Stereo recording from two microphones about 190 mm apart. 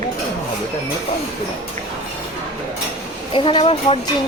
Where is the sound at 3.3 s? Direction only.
25° left (ahead or behind).